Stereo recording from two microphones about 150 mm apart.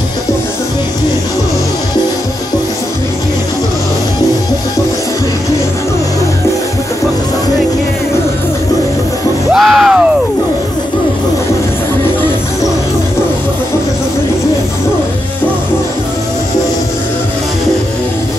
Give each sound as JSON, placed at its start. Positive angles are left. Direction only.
{"t": 9.5, "sound": "music", "side_deg": -5}